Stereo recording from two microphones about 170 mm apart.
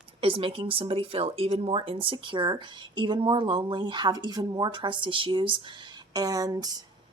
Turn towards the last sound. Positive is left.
turn(degrees=-25)  # may be behind; listen again after turning